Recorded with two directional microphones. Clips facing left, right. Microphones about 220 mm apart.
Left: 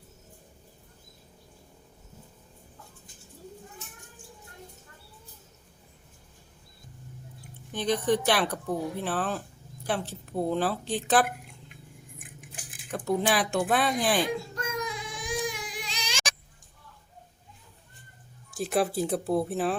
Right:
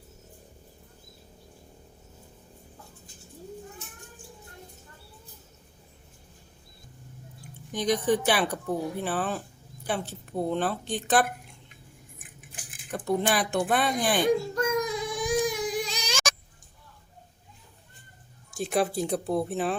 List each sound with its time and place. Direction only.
7.7 s speech: 15° right (ahead or behind)
8.0 s a woman's voice: 5° right (ahead or behind)
12.9 s a woman's voice: centre (ahead or behind)
14.5 s baby cry: 40° right (ahead or behind)
18.5 s a woman's voice: centre (ahead or behind)